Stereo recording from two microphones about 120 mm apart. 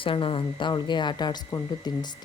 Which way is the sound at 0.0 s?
45° left (ahead or behind).